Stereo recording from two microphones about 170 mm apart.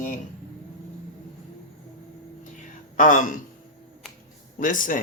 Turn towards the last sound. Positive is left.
turn(degrees=50)  # may be behind; listen again after turning